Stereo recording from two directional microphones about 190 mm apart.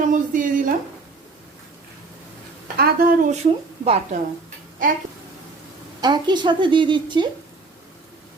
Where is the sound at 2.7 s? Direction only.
50° right (ahead or behind).